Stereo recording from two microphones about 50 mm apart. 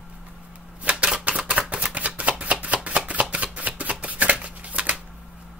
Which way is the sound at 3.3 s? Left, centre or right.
Right.